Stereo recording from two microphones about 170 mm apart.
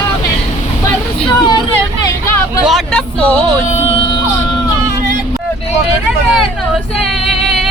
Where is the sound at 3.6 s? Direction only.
40° left (ahead or behind).